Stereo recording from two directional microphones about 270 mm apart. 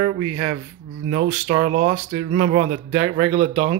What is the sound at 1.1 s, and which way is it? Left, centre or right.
Speech, right.